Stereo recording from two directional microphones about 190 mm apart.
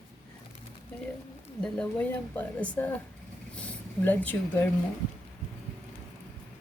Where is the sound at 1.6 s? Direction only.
5° left (ahead or behind).